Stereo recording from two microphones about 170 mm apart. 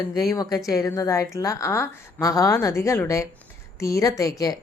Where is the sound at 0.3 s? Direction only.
20° left (ahead or behind).